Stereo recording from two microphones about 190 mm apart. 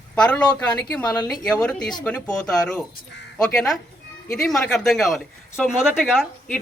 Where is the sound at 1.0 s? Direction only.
20° left (ahead or behind).